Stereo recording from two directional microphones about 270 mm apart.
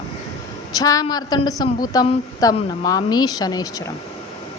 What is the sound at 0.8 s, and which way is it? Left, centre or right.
A woman's voice, centre.